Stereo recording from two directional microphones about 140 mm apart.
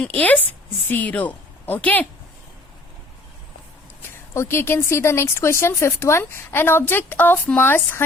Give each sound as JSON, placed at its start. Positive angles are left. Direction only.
{"t": 0.0, "sound": "speech", "side_deg": 10}
{"t": 4.4, "sound": "speech", "side_deg": 20}